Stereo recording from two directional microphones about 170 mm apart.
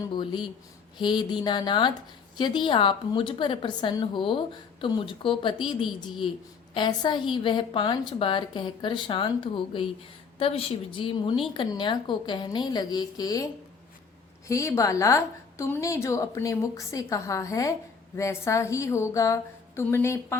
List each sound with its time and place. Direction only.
0.0 s a woman's voice: 25° left (ahead or behind)
6.7 s a woman's voice: 25° left (ahead or behind)